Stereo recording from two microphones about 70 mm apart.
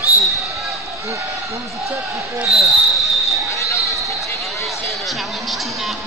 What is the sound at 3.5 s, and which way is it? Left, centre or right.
Basketball bounce, left.